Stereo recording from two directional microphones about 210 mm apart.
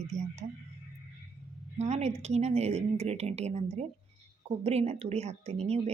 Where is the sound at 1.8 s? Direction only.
30° right (ahead or behind).